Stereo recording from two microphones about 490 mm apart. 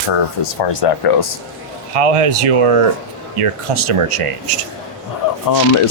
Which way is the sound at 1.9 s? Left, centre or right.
Right.